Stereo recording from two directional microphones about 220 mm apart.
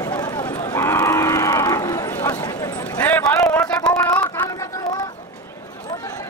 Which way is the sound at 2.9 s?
10° left (ahead or behind).